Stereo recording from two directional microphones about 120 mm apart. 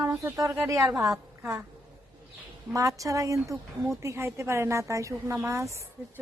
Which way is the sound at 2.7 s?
25° right (ahead or behind).